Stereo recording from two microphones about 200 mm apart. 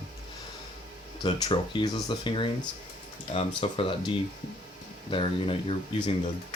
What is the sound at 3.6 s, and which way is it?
Speech, 25° left (ahead or behind).